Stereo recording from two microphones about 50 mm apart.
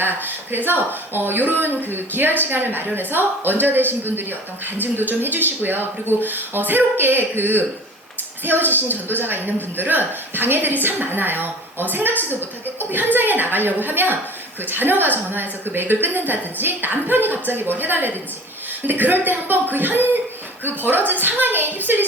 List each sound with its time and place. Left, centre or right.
0.0 s speech: right